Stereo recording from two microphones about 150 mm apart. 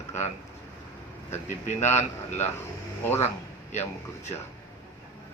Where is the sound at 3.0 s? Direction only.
15° left (ahead or behind).